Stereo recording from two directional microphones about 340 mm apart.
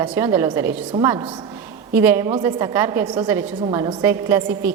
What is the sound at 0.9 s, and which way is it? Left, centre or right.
Speech, centre.